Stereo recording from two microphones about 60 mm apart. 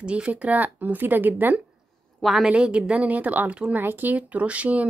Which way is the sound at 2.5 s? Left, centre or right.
Centre.